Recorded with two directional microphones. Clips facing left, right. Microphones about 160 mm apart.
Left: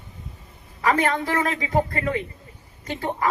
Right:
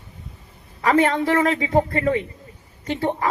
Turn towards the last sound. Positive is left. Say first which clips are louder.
# right 4 dB
turn(degrees=-30)  # may be behind; listen again after turning